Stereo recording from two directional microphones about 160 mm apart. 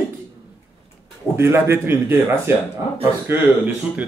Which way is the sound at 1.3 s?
15° right (ahead or behind).